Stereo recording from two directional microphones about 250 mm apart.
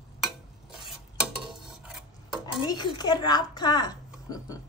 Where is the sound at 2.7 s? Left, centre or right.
Centre.